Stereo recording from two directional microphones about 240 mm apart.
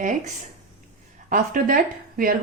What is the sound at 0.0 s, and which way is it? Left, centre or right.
Speech, right.